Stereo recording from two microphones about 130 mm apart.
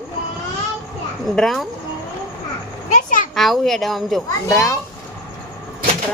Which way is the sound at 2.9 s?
85° left.